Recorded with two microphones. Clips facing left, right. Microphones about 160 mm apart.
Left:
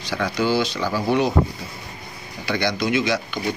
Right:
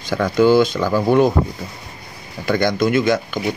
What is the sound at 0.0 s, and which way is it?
Speech, 50° right (ahead or behind).